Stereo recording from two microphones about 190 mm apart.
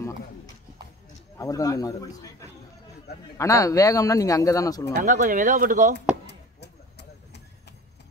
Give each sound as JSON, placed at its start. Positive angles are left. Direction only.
{"t": 1.4, "sound": "speech", "side_deg": 15}
{"t": 3.3, "sound": "speech", "side_deg": 15}
{"t": 5.0, "sound": "speech", "side_deg": -45}
{"t": 6.2, "sound": "a sound", "side_deg": 60}